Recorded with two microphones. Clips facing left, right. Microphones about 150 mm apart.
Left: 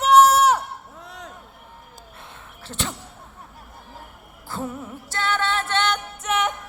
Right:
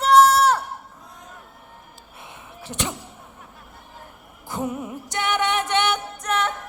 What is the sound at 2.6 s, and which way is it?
Speech, 15° right (ahead or behind).